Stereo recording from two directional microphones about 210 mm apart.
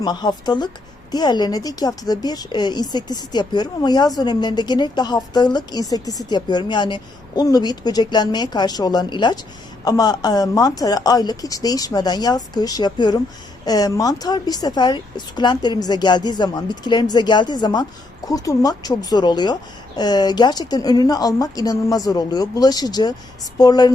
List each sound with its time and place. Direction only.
0.0 s a woman's voice: 20° left (ahead or behind)